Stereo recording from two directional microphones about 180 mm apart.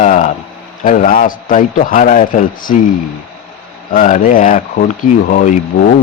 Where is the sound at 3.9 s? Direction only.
45° left (ahead or behind).